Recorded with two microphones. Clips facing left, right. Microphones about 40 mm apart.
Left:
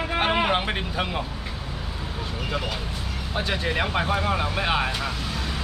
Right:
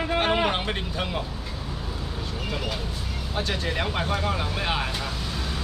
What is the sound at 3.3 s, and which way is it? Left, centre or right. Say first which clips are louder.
Speech: left 2 dB; centre.